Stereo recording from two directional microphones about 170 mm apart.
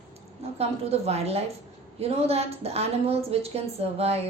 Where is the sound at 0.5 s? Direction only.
35° right (ahead or behind).